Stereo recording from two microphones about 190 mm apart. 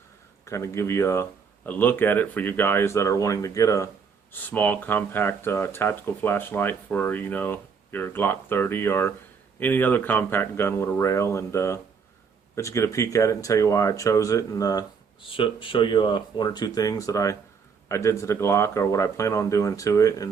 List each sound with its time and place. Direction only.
0.4 s speech: 15° left (ahead or behind)